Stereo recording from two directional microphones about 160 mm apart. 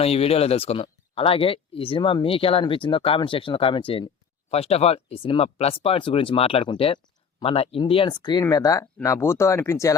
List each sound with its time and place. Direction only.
0.0 s speech: 40° left (ahead or behind); by 9.9 s 15° left (ahead or behind)